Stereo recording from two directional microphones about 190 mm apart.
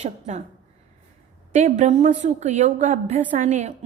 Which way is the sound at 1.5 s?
40° right (ahead or behind).